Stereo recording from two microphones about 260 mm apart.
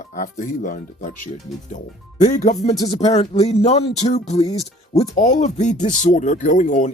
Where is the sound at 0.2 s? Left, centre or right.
Left.